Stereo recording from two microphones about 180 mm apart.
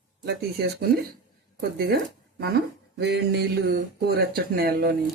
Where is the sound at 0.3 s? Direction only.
60° right (ahead or behind).